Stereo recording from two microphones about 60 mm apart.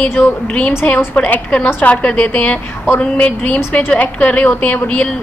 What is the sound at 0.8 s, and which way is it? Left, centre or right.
A woman's voice, left.